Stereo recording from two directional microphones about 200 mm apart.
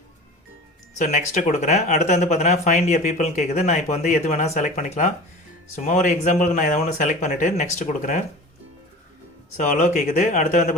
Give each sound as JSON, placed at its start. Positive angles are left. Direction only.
{"t": 0.9, "sound": "speech", "side_deg": 35}
{"t": 9.6, "sound": "speech", "side_deg": 40}